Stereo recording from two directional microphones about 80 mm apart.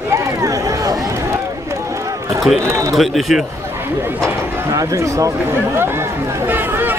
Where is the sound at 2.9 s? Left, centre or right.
Centre.